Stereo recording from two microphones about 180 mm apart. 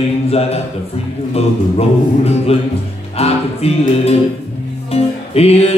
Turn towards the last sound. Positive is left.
turn(degrees=35)  # may be behind; listen again after turning